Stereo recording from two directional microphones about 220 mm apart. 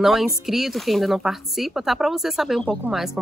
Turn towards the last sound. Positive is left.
turn(degrees=0)  # may be behind; listen again after turning